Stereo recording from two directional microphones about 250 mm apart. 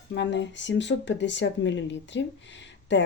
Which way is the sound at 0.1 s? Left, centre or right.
Left.